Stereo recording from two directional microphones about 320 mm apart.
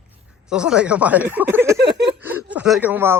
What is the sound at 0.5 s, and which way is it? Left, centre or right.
Speech, centre.